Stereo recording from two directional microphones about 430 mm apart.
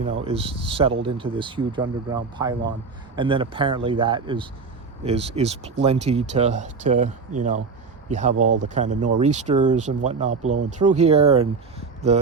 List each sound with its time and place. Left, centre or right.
0.3 s speech: centre
8.1 s speech: centre
8.4 s speech: right
8.7 s speech: centre